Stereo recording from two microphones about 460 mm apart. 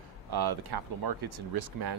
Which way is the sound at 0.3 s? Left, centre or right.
Right.